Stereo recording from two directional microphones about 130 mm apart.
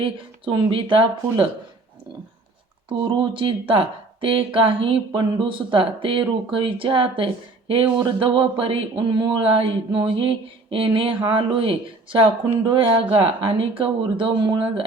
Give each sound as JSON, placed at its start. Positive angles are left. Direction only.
{"t": 0.0, "sound": "speech", "side_deg": -40}
{"t": 3.0, "sound": "speech", "side_deg": -35}